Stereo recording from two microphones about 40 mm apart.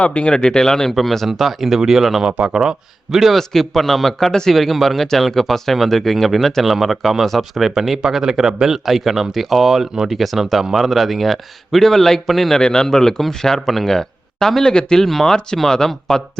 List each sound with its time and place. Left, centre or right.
0.0 s speech: left; by 3.3 s centre
3.3 s speech: centre
12.5 s speech: centre